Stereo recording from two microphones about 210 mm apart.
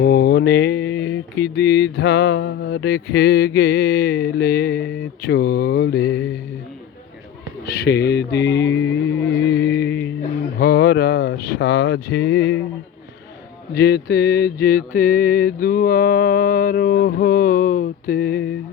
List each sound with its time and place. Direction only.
0.0 s mantra: 50° left (ahead or behind)
7.6 s mantra: 50° left (ahead or behind)
10.6 s speech: 45° left (ahead or behind)
13.7 s mantra: 50° left (ahead or behind)